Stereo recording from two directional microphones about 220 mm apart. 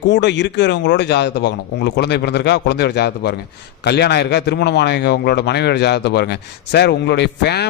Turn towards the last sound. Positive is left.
turn(degrees=50)  # may be behind; listen again after turning